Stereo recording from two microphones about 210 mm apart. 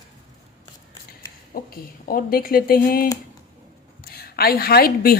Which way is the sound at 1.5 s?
45° left (ahead or behind).